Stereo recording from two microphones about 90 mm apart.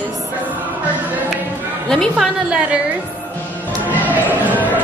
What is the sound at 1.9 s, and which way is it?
Speech, 5° left (ahead or behind).